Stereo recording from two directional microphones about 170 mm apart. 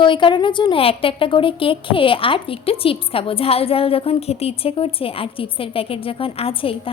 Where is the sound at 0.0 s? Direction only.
30° left (ahead or behind).